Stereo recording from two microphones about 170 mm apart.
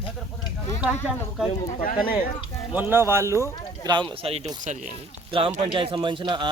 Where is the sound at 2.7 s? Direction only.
10° right (ahead or behind).